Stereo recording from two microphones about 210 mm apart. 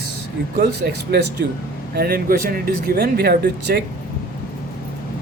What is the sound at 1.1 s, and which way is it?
Speech, 50° right (ahead or behind).